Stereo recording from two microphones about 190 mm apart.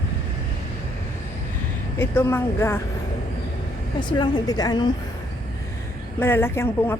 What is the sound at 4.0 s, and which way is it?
Speech, 25° left (ahead or behind).